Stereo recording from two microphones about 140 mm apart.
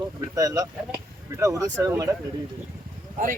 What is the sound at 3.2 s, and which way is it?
Speech, 65° right (ahead or behind).